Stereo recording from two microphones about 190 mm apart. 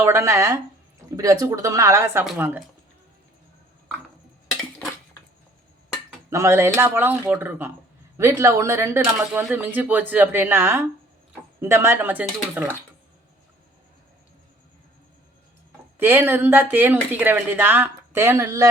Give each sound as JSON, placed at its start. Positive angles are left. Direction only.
{"t": 0.0, "sound": "speech", "side_deg": -15}
{"t": 6.3, "sound": "speech", "side_deg": -15}
{"t": 16.0, "sound": "speech", "side_deg": -10}